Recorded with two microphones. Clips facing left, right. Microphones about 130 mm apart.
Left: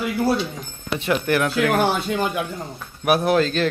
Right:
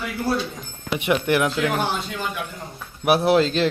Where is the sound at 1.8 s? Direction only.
55° left (ahead or behind).